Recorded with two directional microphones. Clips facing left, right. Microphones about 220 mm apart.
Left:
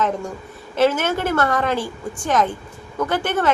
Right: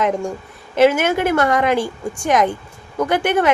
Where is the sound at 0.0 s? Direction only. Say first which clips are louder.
Right 3 dB; 10° right (ahead or behind).